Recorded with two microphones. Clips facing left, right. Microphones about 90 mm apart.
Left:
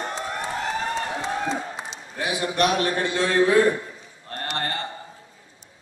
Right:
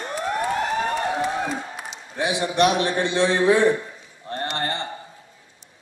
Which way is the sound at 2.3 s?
25° right (ahead or behind).